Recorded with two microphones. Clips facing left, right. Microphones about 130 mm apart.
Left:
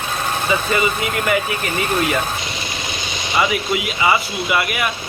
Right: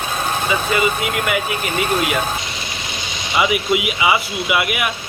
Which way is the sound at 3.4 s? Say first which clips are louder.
Right 2 dB; 10° right (ahead or behind).